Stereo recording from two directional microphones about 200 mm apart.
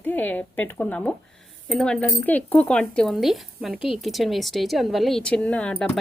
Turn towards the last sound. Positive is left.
turn(degrees=5)  # may be behind; listen again after turning